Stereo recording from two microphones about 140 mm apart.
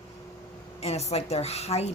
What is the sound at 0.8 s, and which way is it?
Speech, 50° left (ahead or behind).